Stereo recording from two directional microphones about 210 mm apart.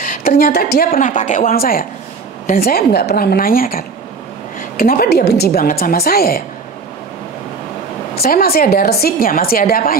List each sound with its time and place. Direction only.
0.0 s a woman's voice: 40° left (ahead or behind)
8.2 s a woman's voice: 45° left (ahead or behind)